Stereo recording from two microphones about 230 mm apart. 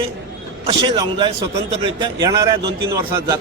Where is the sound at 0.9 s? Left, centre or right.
Right.